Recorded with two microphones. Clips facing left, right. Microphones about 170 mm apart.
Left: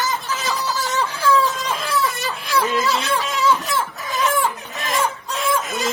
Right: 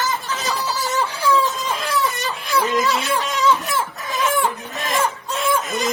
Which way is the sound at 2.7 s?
15° right (ahead or behind).